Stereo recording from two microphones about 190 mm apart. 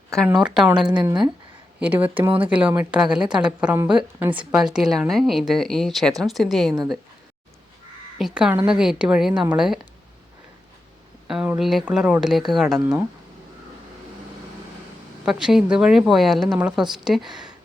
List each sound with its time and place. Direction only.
0.3 s a woman's voice: 5° right (ahead or behind)
0.9 s speech: 25° right (ahead or behind)
1.8 s a woman's voice: 10° right (ahead or behind)
8.2 s a woman's voice: 5° right (ahead or behind)
11.3 s a woman's voice: 5° right (ahead or behind)
15.2 s a woman's voice: 5° right (ahead or behind)